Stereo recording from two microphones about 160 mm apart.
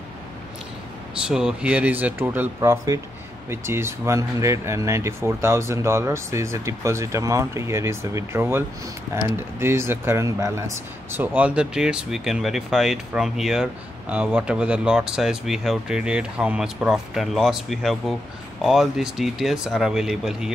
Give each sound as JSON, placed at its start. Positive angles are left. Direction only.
{"t": 1.1, "sound": "speech", "side_deg": -5}